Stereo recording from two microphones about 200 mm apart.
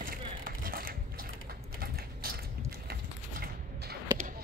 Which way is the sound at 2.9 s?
50° right (ahead or behind).